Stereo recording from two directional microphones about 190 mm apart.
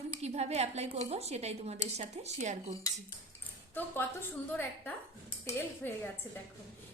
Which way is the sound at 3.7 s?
10° left (ahead or behind).